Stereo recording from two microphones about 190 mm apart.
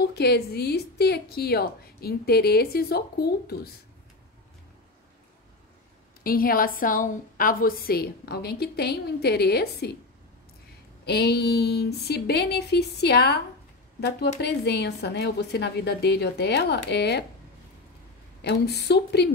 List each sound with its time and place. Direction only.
0.0 s a woman's voice: 60° left (ahead or behind)
6.2 s a woman's voice: 50° left (ahead or behind)
11.1 s a woman's voice: 60° left (ahead or behind)
18.4 s a woman's voice: 60° left (ahead or behind)